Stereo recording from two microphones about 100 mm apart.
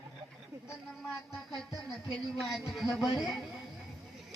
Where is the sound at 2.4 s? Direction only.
Centre (ahead or behind).